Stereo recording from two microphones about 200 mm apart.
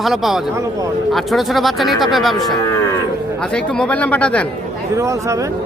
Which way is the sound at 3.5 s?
5° left (ahead or behind).